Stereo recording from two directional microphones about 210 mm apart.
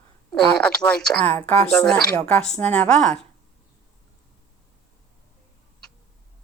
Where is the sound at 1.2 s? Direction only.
25° right (ahead or behind).